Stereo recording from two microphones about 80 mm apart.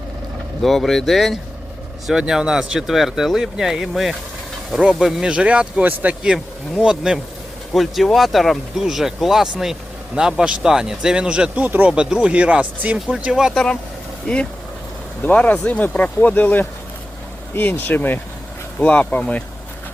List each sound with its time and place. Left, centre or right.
0.6 s speech: centre
14.3 s speech: centre